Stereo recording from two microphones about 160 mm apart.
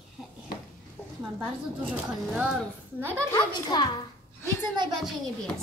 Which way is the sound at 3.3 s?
25° left (ahead or behind).